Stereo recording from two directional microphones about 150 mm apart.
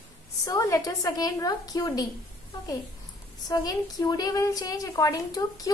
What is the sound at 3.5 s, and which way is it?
A woman's voice, 25° left (ahead or behind).